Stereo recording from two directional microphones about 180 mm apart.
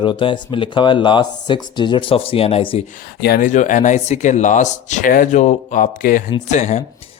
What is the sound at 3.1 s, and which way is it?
Speech, 60° left (ahead or behind).